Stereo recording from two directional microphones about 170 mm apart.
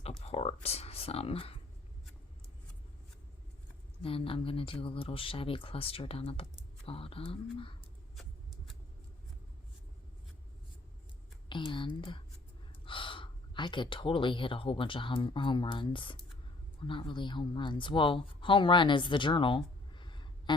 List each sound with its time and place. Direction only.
0.0 s a sound: 35° left (ahead or behind)
4.0 s speech: 35° left (ahead or behind)
8.1 s vehicle: centre (ahead or behind)
11.4 s speech: 30° left (ahead or behind)